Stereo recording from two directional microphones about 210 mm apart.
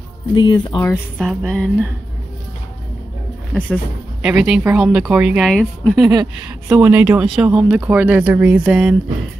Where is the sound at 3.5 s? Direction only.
5° right (ahead or behind).